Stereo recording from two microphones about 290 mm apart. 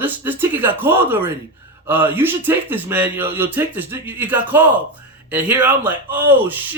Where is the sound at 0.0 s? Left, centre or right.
Centre.